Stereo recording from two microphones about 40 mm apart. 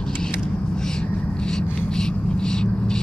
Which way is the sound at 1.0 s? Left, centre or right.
Centre.